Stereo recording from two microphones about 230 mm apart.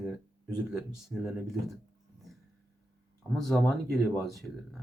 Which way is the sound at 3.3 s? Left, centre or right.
Centre.